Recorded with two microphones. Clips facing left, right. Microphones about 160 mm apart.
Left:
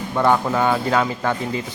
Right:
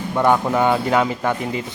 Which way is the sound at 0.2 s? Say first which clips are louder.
Right 1 dB; 15° right (ahead or behind).